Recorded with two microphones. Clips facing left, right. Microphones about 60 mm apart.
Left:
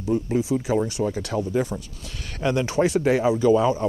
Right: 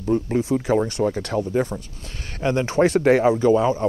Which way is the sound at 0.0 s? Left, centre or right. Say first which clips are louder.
Right 2 dB; right.